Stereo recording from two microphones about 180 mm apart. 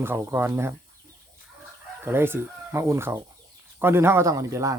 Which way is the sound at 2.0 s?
15° right (ahead or behind).